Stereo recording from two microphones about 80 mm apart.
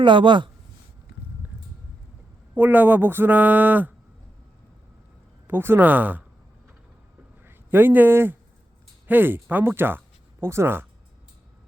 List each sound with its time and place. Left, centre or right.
0.0 s speech: right
2.6 s speech: right
5.5 s speech: right
7.4 s a man's voice: right